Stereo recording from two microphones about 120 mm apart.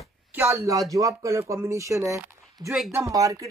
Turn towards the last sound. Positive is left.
turn(degrees=-30)  # may be behind; listen again after turning